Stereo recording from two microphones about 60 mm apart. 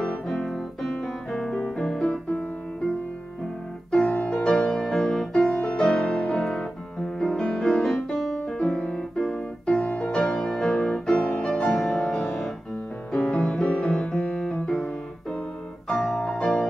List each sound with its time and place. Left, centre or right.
0.0 s piano: centre
4.0 s music: centre
7.6 s music: centre
8.4 s music: centre
10.2 s music: centre
13.1 s piano: centre
15.9 s music: centre